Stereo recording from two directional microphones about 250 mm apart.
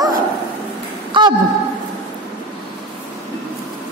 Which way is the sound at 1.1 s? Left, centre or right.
Centre.